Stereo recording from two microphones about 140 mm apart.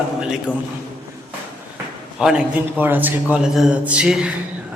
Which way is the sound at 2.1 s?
5° right (ahead or behind).